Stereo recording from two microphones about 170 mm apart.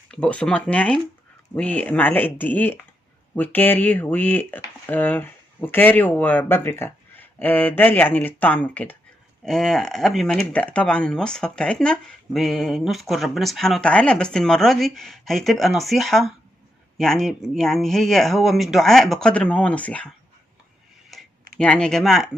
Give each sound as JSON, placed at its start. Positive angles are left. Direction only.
{"t": 0.1, "sound": "speech", "side_deg": 5}
{"t": 21.1, "sound": "tick-tock", "side_deg": 0}
{"t": 21.6, "sound": "speech", "side_deg": 5}